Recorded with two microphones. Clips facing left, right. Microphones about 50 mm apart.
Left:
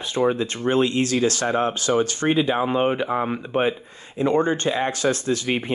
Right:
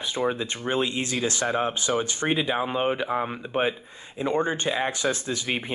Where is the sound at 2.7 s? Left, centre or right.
Left.